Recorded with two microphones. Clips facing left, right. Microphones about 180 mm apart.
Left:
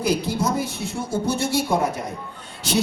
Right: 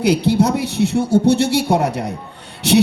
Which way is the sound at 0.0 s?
70° right (ahead or behind).